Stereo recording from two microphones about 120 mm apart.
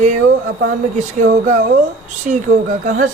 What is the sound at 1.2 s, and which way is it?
A man's voice, 90° right.